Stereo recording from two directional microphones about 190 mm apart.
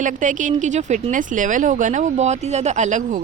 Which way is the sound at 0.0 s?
40° right (ahead or behind).